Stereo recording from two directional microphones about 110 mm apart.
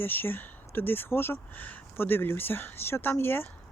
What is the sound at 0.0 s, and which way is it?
Speech, 20° left (ahead or behind).